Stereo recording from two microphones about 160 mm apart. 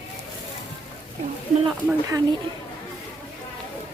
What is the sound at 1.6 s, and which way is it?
Speech, 20° right (ahead or behind).